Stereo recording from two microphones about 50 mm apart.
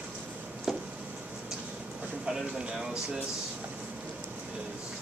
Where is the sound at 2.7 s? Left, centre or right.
Centre.